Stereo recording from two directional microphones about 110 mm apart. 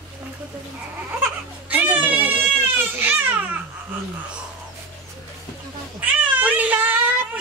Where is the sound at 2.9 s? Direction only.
15° right (ahead or behind).